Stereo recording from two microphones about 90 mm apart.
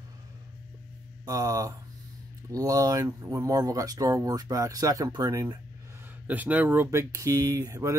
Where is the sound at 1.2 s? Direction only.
40° right (ahead or behind).